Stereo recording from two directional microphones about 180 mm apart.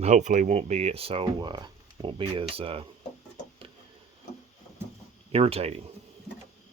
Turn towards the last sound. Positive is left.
turn(degrees=-35)  # may be behind; listen again after turning